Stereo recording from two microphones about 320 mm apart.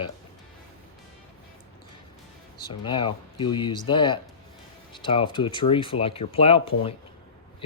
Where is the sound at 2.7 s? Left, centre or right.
Centre.